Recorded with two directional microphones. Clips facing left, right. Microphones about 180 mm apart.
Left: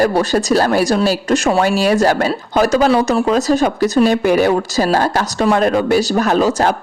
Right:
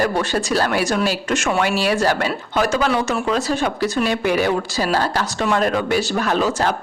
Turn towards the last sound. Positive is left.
turn(degrees=40)  # may be behind; listen again after turning